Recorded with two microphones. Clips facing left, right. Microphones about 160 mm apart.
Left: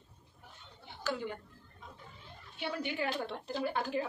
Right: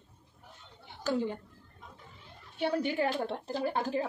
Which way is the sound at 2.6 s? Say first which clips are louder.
Right 7 dB; 40° right (ahead or behind).